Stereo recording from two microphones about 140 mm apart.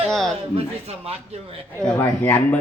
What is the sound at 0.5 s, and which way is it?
Speech, 45° right (ahead or behind).